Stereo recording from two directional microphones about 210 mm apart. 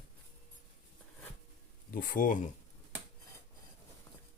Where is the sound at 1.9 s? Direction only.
40° left (ahead or behind).